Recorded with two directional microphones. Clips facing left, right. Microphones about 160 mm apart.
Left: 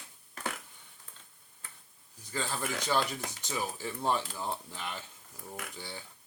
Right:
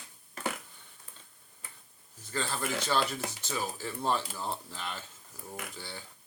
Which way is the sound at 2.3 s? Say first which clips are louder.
Right 2 dB; 15° left (ahead or behind).